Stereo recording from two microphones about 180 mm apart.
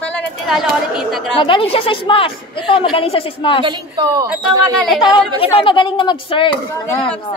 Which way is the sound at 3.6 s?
25° right (ahead or behind).